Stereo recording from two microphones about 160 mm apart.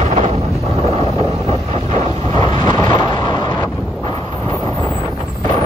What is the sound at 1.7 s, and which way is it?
Wind noise, 40° right (ahead or behind).